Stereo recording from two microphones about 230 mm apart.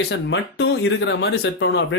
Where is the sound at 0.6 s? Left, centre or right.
Left.